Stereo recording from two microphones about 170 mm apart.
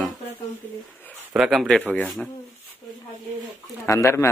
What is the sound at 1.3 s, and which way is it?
Speech, centre (ahead or behind).